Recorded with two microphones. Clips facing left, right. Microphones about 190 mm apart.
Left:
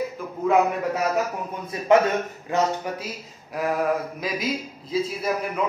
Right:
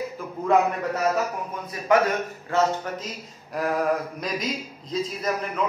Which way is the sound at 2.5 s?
15° left (ahead or behind).